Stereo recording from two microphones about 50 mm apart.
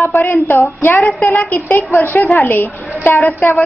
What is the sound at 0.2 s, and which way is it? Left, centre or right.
A woman's voice, left.